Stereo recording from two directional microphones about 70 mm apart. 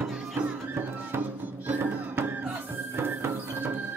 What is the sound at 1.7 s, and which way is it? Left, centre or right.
Music, right.